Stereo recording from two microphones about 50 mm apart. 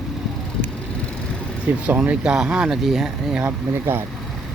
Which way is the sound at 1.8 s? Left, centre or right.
Right.